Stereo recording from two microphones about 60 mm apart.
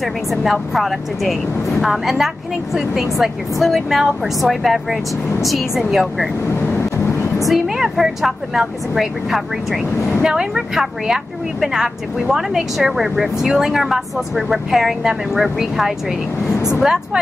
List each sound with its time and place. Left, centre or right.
0.0 s speech: centre
6.5 s vehicle: left
7.4 s speech: centre
16.5 s speech: left
16.8 s speech: centre